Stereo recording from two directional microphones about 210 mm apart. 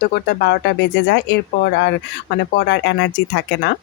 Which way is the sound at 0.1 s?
50° left (ahead or behind).